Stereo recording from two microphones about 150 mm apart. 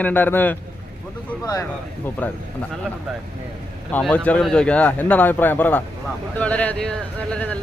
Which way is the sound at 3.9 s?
10° left (ahead or behind).